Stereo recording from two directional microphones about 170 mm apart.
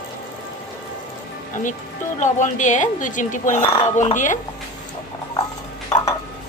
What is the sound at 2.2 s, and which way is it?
A woman's voice, 45° left (ahead or behind).